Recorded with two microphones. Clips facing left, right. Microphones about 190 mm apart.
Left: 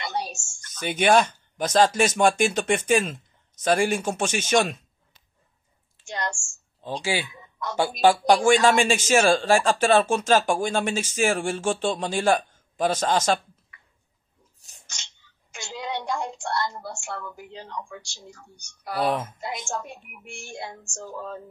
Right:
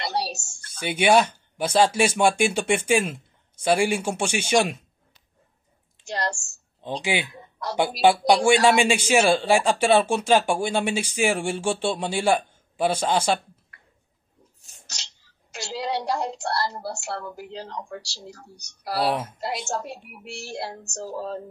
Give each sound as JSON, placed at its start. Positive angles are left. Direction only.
{"t": 0.0, "sound": "a sound", "side_deg": -35}
{"t": 0.7, "sound": "speech", "side_deg": -10}
{"t": 6.0, "sound": "speech", "side_deg": -35}
{"t": 7.0, "sound": "speech", "side_deg": -15}
{"t": 7.2, "sound": "a sound", "side_deg": -35}
{"t": 8.5, "sound": "speech", "side_deg": -15}
{"t": 14.9, "sound": "a woman's voice", "side_deg": -35}